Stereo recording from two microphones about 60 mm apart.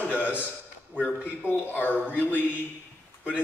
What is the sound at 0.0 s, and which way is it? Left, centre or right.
Speech, left.